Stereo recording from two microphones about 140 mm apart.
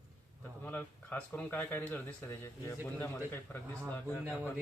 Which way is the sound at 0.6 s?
15° left (ahead or behind).